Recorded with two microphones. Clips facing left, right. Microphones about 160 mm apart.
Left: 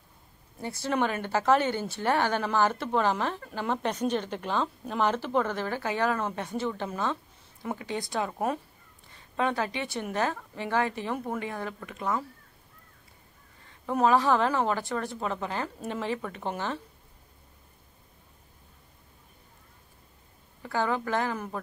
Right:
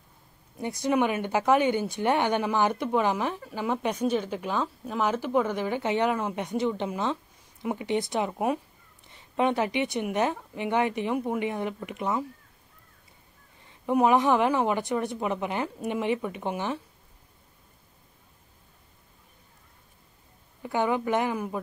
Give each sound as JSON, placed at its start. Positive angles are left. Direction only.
{"t": 0.6, "sound": "speech", "side_deg": -20}
{"t": 9.1, "sound": "speech", "side_deg": -25}
{"t": 13.7, "sound": "speech", "side_deg": -15}
{"t": 20.6, "sound": "speech", "side_deg": -20}